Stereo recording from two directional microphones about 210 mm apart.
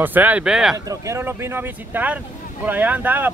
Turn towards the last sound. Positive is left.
turn(degrees=-10)  # may be behind; listen again after turning